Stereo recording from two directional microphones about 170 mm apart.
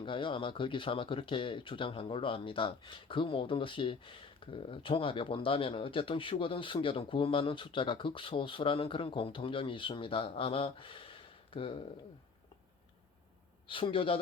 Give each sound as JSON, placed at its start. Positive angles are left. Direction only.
{"t": 0.0, "sound": "speech", "side_deg": 30}
{"t": 13.7, "sound": "speech", "side_deg": 30}